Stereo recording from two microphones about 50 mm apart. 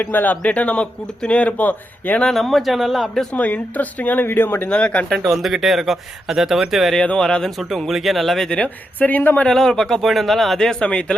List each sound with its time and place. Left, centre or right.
0.0 s speech: left
2.2 s speech: centre
3.3 s speech: left
4.7 s speech: left
5.0 s speech: centre
5.4 s speech: centre
7.2 s speech: centre
7.5 s speech: centre
8.4 s speech: left
9.0 s speech: left
9.5 s speech: centre
10.7 s speech: left